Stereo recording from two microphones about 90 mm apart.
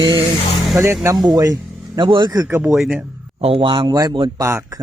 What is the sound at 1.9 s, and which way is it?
Speech, 60° right (ahead or behind).